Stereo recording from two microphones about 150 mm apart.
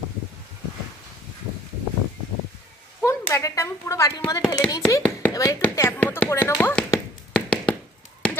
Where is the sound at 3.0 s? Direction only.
15° left (ahead or behind).